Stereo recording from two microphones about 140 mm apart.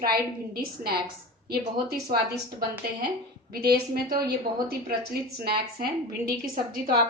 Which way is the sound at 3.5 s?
90° right.